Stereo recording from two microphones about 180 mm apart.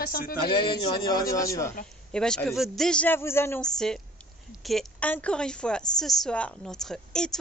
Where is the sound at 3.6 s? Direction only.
5° left (ahead or behind).